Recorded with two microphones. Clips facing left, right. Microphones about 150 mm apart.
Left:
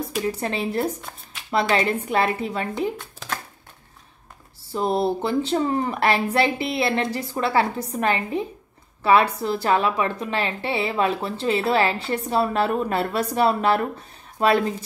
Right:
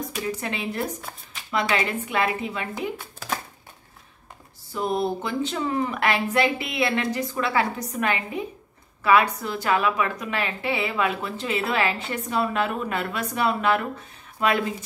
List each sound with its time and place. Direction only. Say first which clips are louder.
0.4 s a woman's voice: left 4 dB; 35° left (ahead or behind)
3.0 s a sound: right 1 dB; 5° right (ahead or behind)
4.7 s a woman's voice: left 3 dB; 35° left (ahead or behind)